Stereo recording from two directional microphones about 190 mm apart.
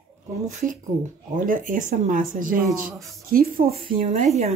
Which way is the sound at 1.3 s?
45° right (ahead or behind).